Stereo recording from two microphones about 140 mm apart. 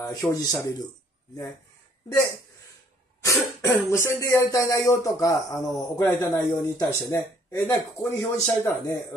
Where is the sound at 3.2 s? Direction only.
20° left (ahead or behind).